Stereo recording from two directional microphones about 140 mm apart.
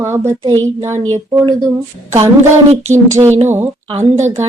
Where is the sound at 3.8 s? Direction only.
50° right (ahead or behind).